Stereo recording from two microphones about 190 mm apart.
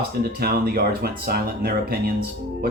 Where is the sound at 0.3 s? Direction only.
55° right (ahead or behind).